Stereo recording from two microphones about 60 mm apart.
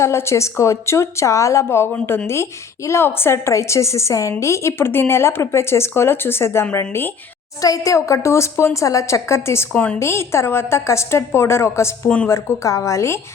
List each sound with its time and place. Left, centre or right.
0.0 s a woman's voice: left
4.8 s a woman's voice: left
7.6 s a woman's voice: left
9.7 s a woman's voice: left
10.0 s a woman's voice: left
12.0 s a woman's voice: centre
12.6 s a woman's voice: left